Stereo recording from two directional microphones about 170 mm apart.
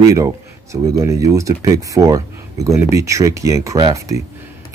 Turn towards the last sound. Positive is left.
turn(degrees=-20)  # may be behind; listen again after turning